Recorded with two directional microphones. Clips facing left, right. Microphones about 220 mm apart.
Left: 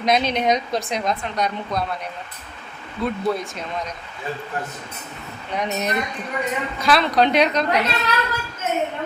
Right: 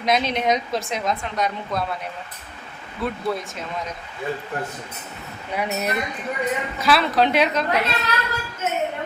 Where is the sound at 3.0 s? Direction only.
5° right (ahead or behind).